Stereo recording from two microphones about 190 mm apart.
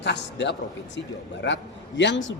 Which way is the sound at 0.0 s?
65° left (ahead or behind).